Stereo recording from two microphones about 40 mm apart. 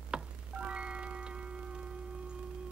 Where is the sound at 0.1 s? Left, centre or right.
Right.